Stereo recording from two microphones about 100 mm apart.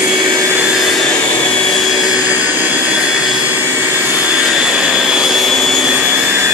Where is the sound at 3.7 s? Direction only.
15° right (ahead or behind); by 5.9 s centre (ahead or behind).